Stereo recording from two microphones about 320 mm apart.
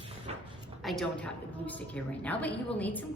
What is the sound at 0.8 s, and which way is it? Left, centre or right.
A woman's voice, centre.